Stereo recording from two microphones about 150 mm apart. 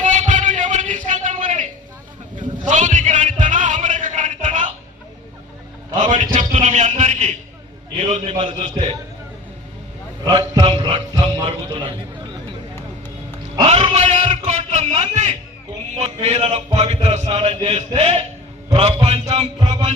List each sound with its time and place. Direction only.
0.0 s a sound: 55° right (ahead or behind)
6.0 s a sound: 55° right (ahead or behind)
7.9 s a man's voice: 50° right (ahead or behind)
10.2 s a man's voice: 25° right (ahead or behind)
10.8 s music: 30° right (ahead or behind)
13.7 s a sound: 35° right (ahead or behind)
13.9 s music: 50° right (ahead or behind)
16.0 s a man's voice: 45° right (ahead or behind)
19.5 s music: 30° right (ahead or behind)